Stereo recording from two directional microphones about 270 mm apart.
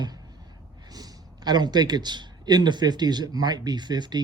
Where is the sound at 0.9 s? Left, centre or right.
Centre.